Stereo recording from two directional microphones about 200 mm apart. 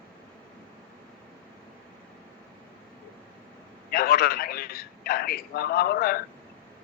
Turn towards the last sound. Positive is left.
turn(degrees=50)  # may be behind; listen again after turning